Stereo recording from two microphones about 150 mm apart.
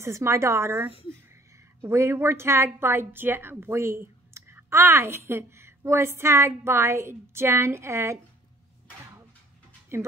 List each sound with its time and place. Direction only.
0.0 s a woman's voice: 20° right (ahead or behind)
9.9 s a woman's voice: 15° right (ahead or behind)